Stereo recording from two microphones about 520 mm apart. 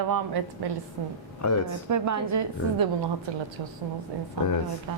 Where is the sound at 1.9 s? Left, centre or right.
Right.